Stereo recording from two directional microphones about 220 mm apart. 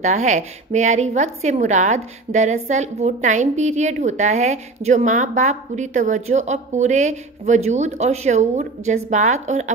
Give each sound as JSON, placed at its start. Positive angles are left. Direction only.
{"t": 0.0, "sound": "a woman's voice", "side_deg": -30}